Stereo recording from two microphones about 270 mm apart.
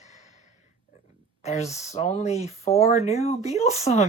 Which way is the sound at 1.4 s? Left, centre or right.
Left.